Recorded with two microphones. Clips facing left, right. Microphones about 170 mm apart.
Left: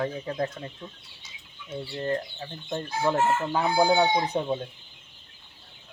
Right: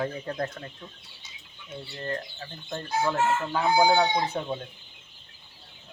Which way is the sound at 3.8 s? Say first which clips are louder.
Left 1 dB; 10° left (ahead or behind).